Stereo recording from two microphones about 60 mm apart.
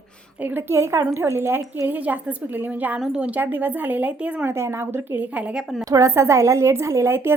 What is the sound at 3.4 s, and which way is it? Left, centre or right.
A woman's voice, right.